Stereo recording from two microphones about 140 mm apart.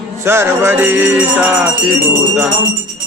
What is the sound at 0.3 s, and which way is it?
Chant, 15° right (ahead or behind).